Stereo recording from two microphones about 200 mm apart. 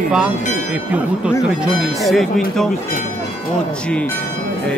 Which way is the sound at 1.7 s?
Centre (ahead or behind).